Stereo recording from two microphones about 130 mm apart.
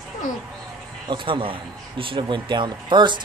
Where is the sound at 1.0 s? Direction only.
40° right (ahead or behind).